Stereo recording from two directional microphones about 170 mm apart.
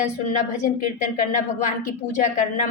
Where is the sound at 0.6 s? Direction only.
50° left (ahead or behind).